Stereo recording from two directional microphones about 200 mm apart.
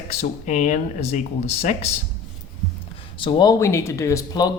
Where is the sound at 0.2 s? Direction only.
35° left (ahead or behind).